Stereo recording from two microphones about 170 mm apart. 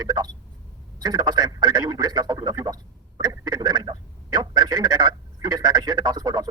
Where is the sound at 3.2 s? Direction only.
25° right (ahead or behind).